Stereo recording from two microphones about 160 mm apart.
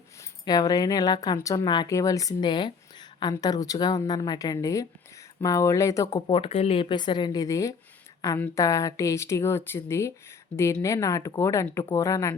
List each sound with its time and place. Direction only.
0.2 s speech: 25° left (ahead or behind)
6.1 s speech: 35° left (ahead or behind)